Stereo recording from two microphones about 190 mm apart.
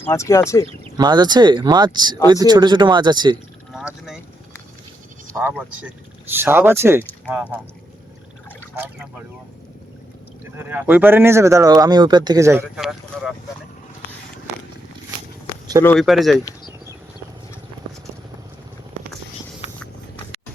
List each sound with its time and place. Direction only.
0.0 s speech: 15° left (ahead or behind)
0.7 s speech: 20° right (ahead or behind)
3.7 s vehicle: centre (ahead or behind)
5.3 s speech: 10° right (ahead or behind)
10.4 s speech: 10° right (ahead or behind)
12.7 s speech: centre (ahead or behind)
15.8 s speech: 10° left (ahead or behind)